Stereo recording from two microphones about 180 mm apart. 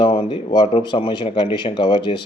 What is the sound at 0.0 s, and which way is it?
A man's voice, 30° left (ahead or behind).